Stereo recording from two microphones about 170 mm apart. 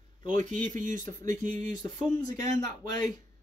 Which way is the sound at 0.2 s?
45° right (ahead or behind).